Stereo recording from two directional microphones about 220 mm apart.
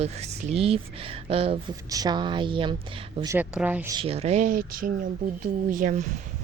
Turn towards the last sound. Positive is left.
turn(degrees=-35)  # may be behind; listen again after turning